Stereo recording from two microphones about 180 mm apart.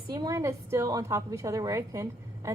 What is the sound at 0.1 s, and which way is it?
A woman's voice, 20° right (ahead or behind).